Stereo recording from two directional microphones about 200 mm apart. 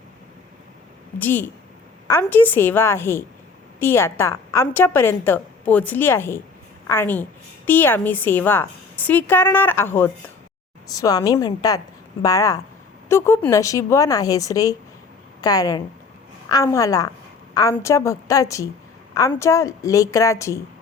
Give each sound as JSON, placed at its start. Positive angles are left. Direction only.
{"t": 1.2, "sound": "a woman's voice", "side_deg": 10}